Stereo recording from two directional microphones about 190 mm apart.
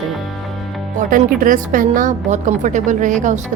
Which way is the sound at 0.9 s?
45° right (ahead or behind).